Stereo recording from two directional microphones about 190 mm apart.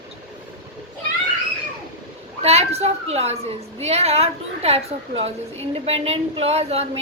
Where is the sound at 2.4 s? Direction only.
35° right (ahead or behind).